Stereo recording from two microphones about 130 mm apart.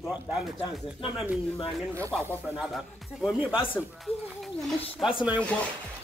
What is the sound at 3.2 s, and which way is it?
Speech, 10° right (ahead or behind).